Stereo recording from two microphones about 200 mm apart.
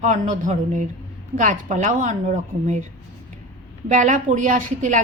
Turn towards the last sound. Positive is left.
turn(degrees=-40)  # may be behind; listen again after turning